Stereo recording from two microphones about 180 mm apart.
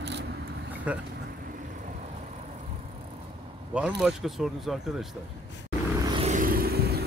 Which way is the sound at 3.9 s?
Centre (ahead or behind).